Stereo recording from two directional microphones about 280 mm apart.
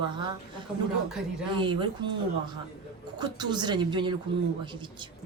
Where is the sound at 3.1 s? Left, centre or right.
Centre.